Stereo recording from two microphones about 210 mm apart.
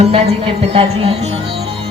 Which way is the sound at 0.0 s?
30° right (ahead or behind).